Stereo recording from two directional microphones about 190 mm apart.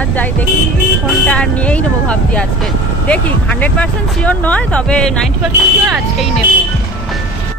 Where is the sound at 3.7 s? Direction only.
5° left (ahead or behind).